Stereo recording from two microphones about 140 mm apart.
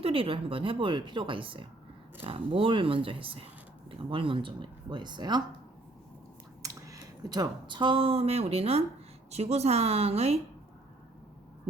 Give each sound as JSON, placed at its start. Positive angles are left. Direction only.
{"t": 0.0, "sound": "a woman's voice", "side_deg": -40}
{"t": 6.6, "sound": "a woman's voice", "side_deg": -25}